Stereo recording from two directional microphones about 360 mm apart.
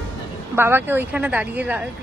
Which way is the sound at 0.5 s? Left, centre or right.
Centre.